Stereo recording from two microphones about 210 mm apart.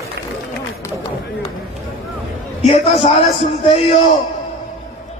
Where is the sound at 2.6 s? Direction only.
25° left (ahead or behind).